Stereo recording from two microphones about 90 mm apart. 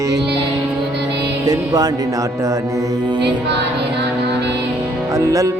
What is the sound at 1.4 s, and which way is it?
Music, 45° right (ahead or behind).